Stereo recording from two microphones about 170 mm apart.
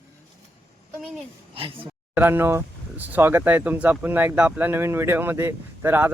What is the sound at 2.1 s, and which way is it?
Speech, 10° right (ahead or behind).